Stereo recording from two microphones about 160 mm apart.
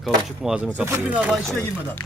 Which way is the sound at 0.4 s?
5° right (ahead or behind).